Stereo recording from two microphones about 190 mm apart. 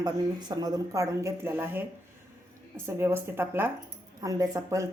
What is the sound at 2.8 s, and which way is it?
Speech, 15° right (ahead or behind).